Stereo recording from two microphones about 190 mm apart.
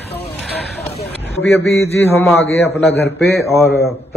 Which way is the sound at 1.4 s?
Centre (ahead or behind).